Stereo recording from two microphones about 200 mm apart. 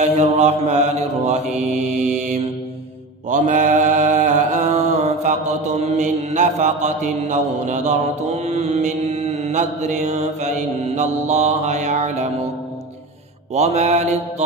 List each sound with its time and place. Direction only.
0.0 s mantra: 35° right (ahead or behind)
3.3 s mantra: 40° right (ahead or behind)
13.6 s mantra: 35° right (ahead or behind)